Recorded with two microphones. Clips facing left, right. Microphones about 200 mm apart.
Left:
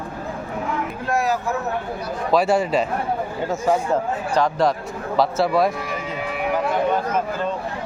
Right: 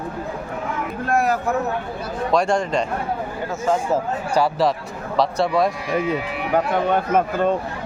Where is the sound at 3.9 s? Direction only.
5° right (ahead or behind).